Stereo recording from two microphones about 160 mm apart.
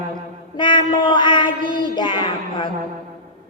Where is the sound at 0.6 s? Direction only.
30° left (ahead or behind).